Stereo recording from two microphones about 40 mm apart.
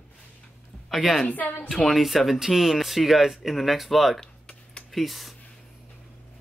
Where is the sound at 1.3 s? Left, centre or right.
Left.